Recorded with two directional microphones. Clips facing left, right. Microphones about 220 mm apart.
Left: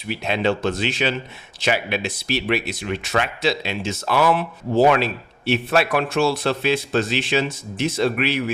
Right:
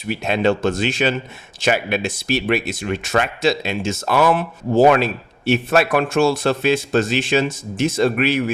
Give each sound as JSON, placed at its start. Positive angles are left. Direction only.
{"t": 0.1, "sound": "speech", "side_deg": -45}